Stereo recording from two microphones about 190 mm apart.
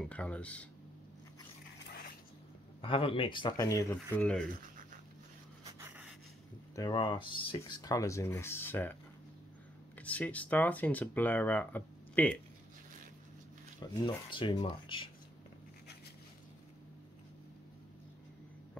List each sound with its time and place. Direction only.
0.0 s speech: 5° left (ahead or behind)
2.8 s speech: 30° left (ahead or behind); by 4.5 s 5° left (ahead or behind)
5.8 s a sound: 10° right (ahead or behind)
6.7 s speech: 20° left (ahead or behind)
9.9 s speech: 10° left (ahead or behind)
13.9 s speech: 25° left (ahead or behind)